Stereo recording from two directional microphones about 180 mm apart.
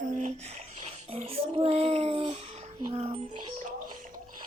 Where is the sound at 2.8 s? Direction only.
35° right (ahead or behind).